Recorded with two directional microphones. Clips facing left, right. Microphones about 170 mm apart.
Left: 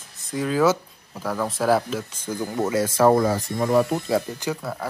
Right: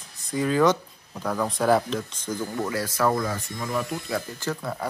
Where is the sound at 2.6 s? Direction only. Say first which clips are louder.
Left 7 dB; 25° left (ahead or behind).